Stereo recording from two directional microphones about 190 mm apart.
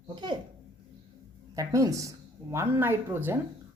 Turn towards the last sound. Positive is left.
turn(degrees=-10)  # may be behind; listen again after turning